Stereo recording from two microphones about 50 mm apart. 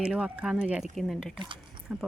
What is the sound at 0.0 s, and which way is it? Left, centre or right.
Speech, right.